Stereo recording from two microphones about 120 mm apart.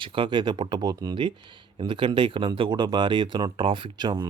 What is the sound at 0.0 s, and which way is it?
Speech, 45° right (ahead or behind).